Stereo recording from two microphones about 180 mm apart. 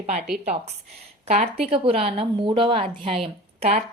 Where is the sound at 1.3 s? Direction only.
35° right (ahead or behind).